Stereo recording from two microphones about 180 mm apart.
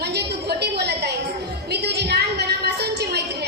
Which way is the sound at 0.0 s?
65° right (ahead or behind).